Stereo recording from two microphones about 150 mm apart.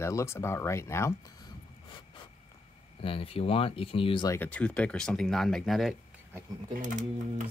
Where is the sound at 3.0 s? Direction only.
35° left (ahead or behind).